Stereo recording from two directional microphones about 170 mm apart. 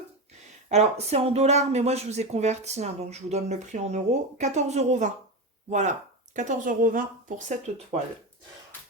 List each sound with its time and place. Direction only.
0.7 s a woman's voice: 40° right (ahead or behind)